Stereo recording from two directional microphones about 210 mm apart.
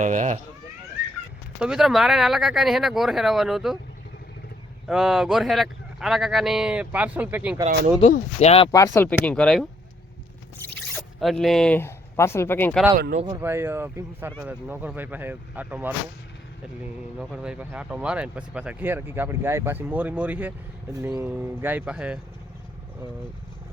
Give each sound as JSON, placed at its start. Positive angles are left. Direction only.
{"t": 0.0, "sound": "speech", "side_deg": -35}
{"t": 1.5, "sound": "speech", "side_deg": -5}
{"t": 4.9, "sound": "speech", "side_deg": 0}
{"t": 8.0, "sound": "speech", "side_deg": 30}
{"t": 8.7, "sound": "speech", "side_deg": 15}
{"t": 10.9, "sound": "speech", "side_deg": 0}
{"t": 13.2, "sound": "speech", "side_deg": -15}
{"t": 17.2, "sound": "speech", "side_deg": -5}